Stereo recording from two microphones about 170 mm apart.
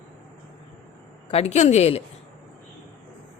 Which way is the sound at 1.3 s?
40° left (ahead or behind).